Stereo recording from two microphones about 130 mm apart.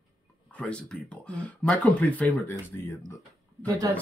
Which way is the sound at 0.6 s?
10° left (ahead or behind).